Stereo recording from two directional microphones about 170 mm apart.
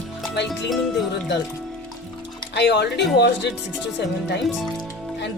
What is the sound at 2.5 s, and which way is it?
Speech, 90° left.